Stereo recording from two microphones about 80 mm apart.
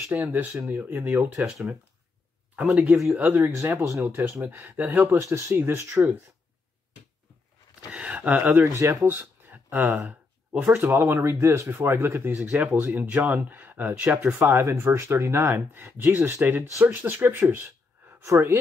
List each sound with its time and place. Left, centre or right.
0.1 s speech: right
2.5 s speech: centre
7.9 s speech: centre
8.7 s speech: right
9.0 s a sound: right
10.0 s speech: right
11.3 s speech: right
11.7 s speech: right